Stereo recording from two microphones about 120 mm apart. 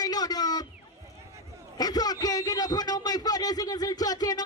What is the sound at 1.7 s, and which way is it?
A man's voice, 35° left (ahead or behind).